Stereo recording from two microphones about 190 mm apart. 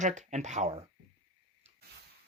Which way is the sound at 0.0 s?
40° right (ahead or behind).